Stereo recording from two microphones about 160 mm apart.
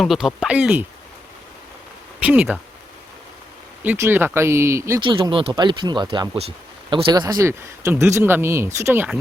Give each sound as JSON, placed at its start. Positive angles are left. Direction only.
{"t": 0.0, "sound": "speech", "side_deg": 0}
{"t": 2.2, "sound": "speech", "side_deg": -10}
{"t": 3.8, "sound": "speech", "side_deg": -15}
{"t": 4.9, "sound": "speech", "side_deg": -30}
{"t": 6.9, "sound": "speech", "side_deg": -25}